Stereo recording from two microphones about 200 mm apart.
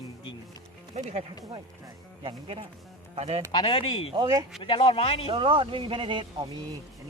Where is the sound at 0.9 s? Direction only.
35° right (ahead or behind).